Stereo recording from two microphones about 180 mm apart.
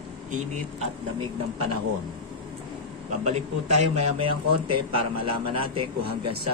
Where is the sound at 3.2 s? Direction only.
40° right (ahead or behind).